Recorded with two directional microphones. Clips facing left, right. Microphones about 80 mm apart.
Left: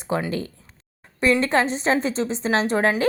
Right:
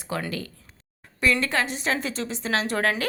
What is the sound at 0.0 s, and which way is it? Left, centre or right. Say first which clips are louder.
A woman's voice: left 5 dB; left.